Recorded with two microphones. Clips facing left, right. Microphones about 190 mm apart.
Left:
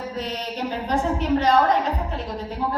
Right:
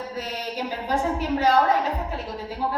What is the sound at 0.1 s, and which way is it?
A woman's voice, 5° right (ahead or behind).